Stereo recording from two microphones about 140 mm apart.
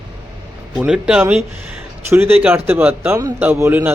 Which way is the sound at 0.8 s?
5° right (ahead or behind).